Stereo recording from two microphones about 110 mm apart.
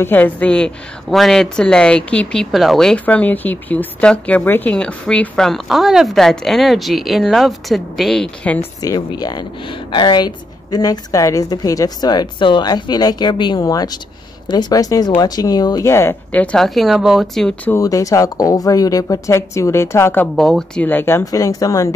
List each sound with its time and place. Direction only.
0.0 s a woman's voice: 15° left (ahead or behind)
8.8 s a woman's voice: 35° left (ahead or behind)
15.9 s speech: 25° left (ahead or behind)
16.3 s a woman's voice: 15° left (ahead or behind)
16.6 s speech: centre (ahead or behind)
17.7 s speech: 30° left (ahead or behind)
20.3 s speech: 5° left (ahead or behind)
20.8 s speech: 20° left (ahead or behind)
21.3 s a woman's voice: 35° left (ahead or behind)